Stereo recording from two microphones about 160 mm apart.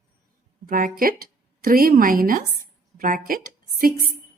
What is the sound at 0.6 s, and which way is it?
A woman's voice, 60° right (ahead or behind).